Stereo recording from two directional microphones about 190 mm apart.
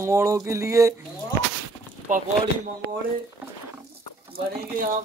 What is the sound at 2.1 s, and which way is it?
Speech, 40° right (ahead or behind).